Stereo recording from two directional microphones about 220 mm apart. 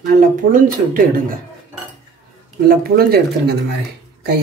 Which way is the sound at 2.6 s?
45° right (ahead or behind).